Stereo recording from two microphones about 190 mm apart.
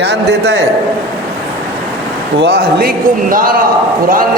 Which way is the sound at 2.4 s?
55° right (ahead or behind).